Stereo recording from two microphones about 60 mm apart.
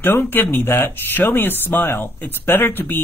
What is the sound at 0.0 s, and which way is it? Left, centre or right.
Speech, left.